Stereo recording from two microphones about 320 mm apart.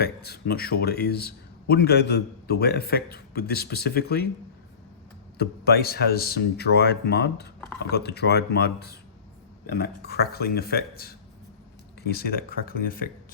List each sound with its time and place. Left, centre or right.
0.0 s a man's voice: left
5.4 s a man's voice: left